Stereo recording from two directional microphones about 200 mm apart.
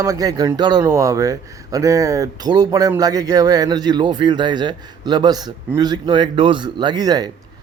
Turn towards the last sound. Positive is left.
turn(degrees=-20)  # may be behind; listen again after turning